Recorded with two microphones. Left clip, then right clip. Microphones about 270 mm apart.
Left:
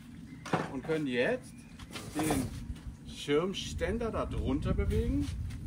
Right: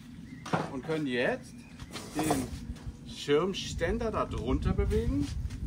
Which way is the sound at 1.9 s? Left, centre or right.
Centre.